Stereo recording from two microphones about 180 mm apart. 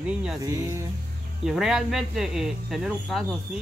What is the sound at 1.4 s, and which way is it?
Speech, 5° right (ahead or behind).